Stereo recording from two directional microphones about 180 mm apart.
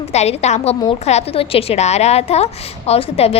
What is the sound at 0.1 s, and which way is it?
A woman's voice, 40° left (ahead or behind).